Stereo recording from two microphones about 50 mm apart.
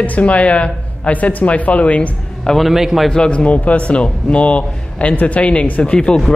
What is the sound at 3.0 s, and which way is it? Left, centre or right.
A man's voice, centre.